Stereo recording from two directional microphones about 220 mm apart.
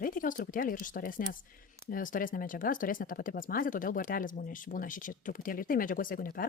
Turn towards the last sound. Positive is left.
turn(degrees=40)  # may be behind; listen again after turning